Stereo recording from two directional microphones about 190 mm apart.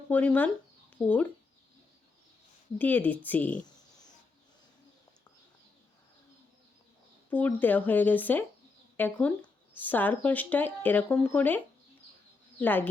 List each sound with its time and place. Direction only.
0.1 s speech: 10° left (ahead or behind)
2.7 s speech: 10° left (ahead or behind)
7.3 s speech: 10° left (ahead or behind)